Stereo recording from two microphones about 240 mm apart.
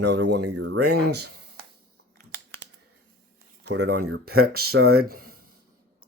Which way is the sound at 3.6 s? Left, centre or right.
Right.